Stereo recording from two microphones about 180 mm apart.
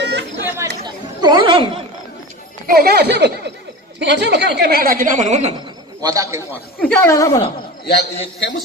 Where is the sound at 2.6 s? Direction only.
60° right (ahead or behind); by 5.5 s 40° right (ahead or behind).